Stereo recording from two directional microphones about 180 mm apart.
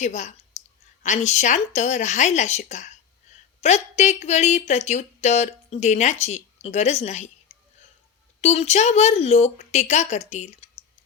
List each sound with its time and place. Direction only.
0.0 s speech: 40° left (ahead or behind)